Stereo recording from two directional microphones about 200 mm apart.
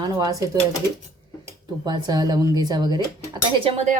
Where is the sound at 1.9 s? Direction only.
20° right (ahead or behind).